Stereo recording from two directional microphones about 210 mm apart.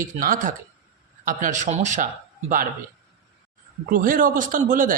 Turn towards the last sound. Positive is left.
turn(degrees=-40)  # may be behind; listen again after turning